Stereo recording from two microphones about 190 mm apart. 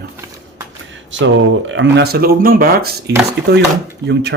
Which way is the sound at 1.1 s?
80° right.